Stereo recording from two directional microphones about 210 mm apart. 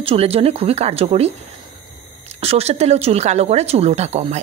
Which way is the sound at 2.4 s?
30° right (ahead or behind).